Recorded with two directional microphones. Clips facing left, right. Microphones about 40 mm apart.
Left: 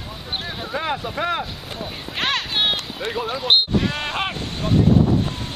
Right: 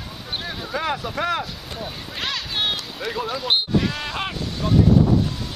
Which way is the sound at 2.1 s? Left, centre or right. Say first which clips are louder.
Left 5 dB; left.